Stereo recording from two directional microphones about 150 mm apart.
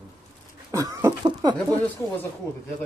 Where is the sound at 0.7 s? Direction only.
20° right (ahead or behind).